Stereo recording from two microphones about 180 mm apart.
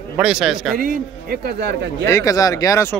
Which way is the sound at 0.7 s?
50° right (ahead or behind).